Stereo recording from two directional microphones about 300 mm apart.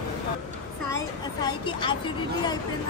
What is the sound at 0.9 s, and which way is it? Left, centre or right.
A woman's voice, centre.